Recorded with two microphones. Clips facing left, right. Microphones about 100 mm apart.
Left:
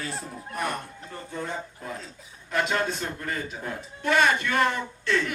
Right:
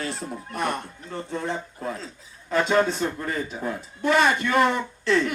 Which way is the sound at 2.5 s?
35° right (ahead or behind).